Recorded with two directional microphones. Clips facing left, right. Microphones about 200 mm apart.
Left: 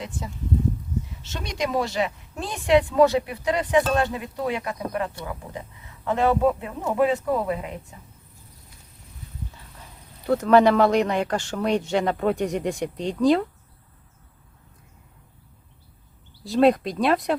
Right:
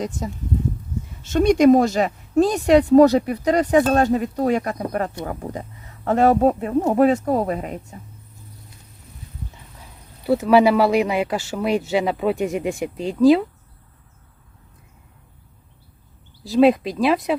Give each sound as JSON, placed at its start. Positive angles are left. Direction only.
{"t": 1.2, "sound": "speech", "side_deg": -50}
{"t": 10.2, "sound": "speech", "side_deg": -5}
{"t": 16.4, "sound": "speech", "side_deg": 0}